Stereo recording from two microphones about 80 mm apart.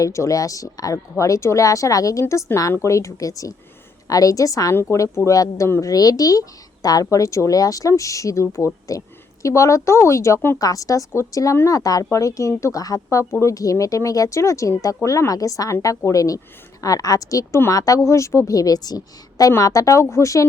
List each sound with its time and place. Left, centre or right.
0.0 s a woman's voice: left
4.7 s a woman's voice: left
10.6 s a woman's voice: left